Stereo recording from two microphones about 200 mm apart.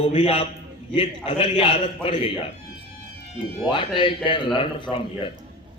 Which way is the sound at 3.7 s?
25° left (ahead or behind).